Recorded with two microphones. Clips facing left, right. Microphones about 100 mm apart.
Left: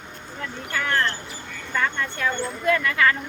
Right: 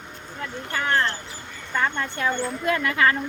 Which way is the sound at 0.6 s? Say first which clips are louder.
Right 1 dB; 30° right (ahead or behind).